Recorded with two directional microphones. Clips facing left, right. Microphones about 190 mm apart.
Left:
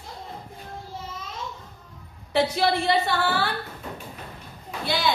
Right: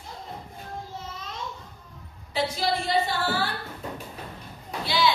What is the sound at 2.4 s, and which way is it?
A woman's voice, 65° left (ahead or behind).